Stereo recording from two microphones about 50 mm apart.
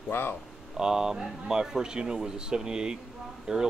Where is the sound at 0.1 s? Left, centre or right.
Left.